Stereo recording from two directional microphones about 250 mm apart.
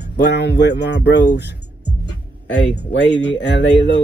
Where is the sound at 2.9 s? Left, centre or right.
Left.